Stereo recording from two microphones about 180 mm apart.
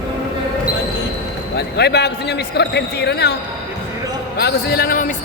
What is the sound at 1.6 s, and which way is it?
Speech, 65° left (ahead or behind).